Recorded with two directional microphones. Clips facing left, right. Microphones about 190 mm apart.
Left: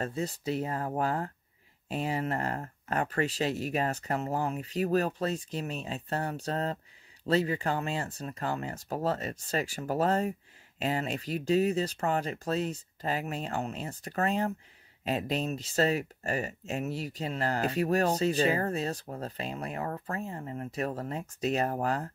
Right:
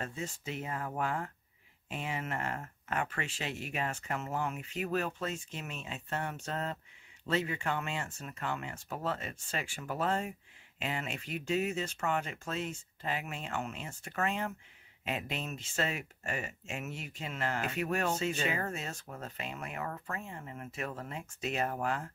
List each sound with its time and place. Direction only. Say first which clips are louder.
0.0 s speech: left 7 dB; 35° left (ahead or behind)